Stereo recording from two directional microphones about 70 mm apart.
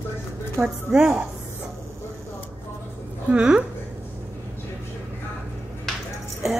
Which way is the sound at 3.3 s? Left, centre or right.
Centre.